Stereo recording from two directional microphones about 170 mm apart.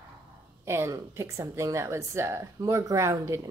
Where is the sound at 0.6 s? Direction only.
15° right (ahead or behind).